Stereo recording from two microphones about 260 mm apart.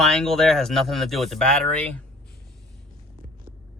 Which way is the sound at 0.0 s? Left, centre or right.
Centre.